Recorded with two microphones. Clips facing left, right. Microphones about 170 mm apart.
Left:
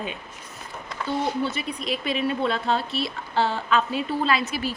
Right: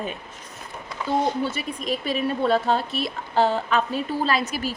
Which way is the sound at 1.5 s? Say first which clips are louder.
Right 1 dB; 40° right (ahead or behind).